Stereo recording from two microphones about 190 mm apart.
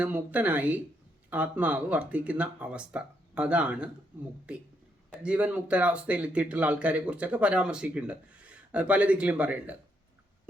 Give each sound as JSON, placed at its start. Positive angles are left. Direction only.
{"t": 0.0, "sound": "a man's voice", "side_deg": -10}